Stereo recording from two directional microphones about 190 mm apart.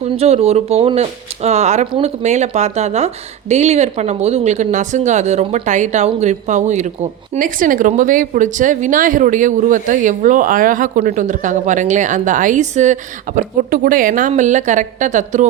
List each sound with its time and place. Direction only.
0.0 s speech: 35° right (ahead or behind)